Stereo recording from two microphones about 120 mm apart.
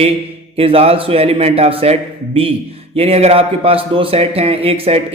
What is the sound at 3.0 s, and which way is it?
Speech, 55° right (ahead or behind).